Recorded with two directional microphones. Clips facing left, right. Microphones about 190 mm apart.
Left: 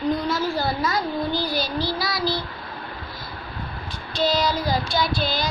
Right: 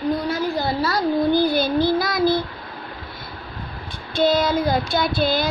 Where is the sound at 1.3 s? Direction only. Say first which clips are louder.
Right 7 dB; 55° right (ahead or behind).